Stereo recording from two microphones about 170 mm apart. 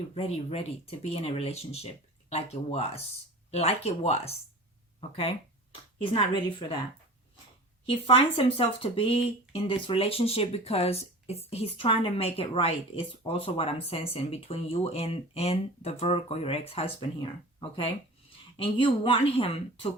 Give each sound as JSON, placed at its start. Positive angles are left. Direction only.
{"t": 0.1, "sound": "speech", "side_deg": 35}
{"t": 7.9, "sound": "speech", "side_deg": 30}